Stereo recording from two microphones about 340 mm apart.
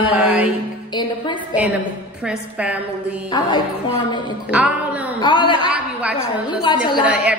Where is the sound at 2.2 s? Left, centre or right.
Centre.